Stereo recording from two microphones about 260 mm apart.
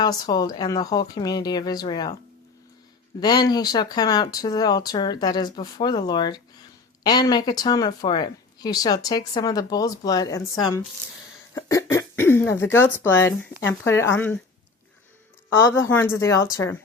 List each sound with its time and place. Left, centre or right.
0.0 s speech: centre
3.2 s speech: centre
15.6 s speech: centre